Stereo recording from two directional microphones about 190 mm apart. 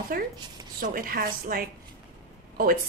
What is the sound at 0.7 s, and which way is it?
A woman's voice, 50° right (ahead or behind).